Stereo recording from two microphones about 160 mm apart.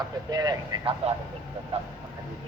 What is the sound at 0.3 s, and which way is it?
Speech, 25° right (ahead or behind).